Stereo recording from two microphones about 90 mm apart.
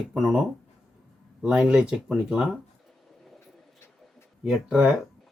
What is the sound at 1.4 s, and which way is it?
Speech, 10° right (ahead or behind).